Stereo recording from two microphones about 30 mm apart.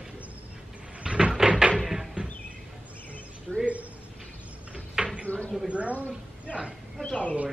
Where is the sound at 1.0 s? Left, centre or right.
Right.